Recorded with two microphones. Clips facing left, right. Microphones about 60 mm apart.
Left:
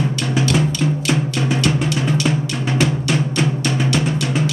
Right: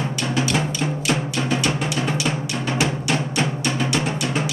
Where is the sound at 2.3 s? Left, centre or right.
Centre.